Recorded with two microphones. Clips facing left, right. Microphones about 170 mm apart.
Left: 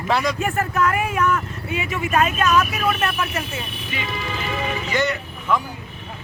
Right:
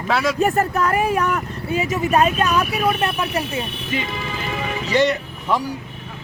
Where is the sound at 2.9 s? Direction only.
15° right (ahead or behind).